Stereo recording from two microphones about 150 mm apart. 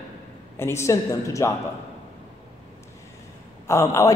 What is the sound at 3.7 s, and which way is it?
Speech, 20° left (ahead or behind).